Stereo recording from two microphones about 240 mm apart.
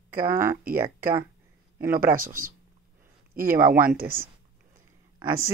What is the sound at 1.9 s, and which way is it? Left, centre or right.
Speech, right.